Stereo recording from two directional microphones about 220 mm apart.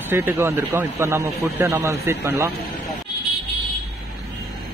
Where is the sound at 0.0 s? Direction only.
10° right (ahead or behind).